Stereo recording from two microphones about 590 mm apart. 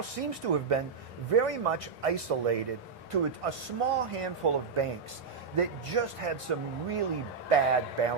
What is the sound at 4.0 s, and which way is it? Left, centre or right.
Speech, right.